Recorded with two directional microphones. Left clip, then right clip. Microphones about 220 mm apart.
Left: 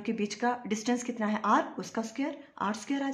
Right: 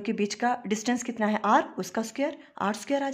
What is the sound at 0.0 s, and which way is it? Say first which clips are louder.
Speech: right 3 dB; 35° right (ahead or behind).